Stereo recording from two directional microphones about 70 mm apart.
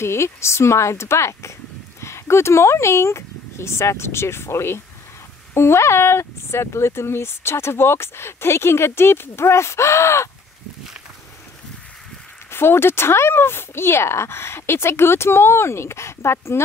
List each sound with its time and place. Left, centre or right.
0.0 s speech: left
12.4 s speech: left